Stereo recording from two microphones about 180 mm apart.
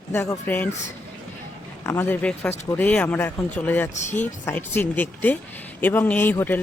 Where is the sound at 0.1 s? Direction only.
15° left (ahead or behind).